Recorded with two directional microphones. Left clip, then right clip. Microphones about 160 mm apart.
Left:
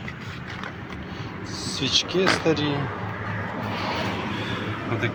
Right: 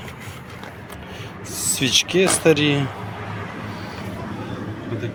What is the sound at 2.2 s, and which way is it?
Speech, 65° right (ahead or behind).